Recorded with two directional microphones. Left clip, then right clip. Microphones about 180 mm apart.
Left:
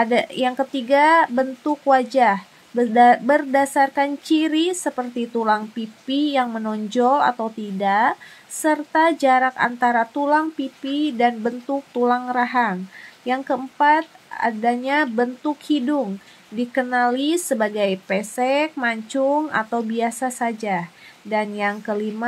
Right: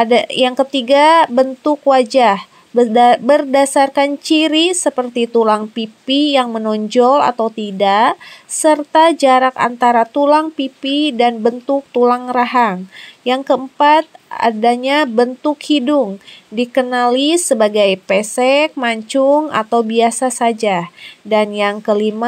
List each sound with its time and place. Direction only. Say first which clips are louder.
0.0 s speech: right 7 dB; 35° right (ahead or behind)